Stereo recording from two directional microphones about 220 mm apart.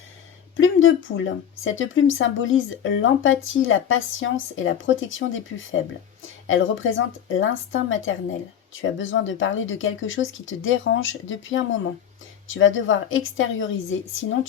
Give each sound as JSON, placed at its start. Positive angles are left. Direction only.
{"t": 0.5, "sound": "speech", "side_deg": 60}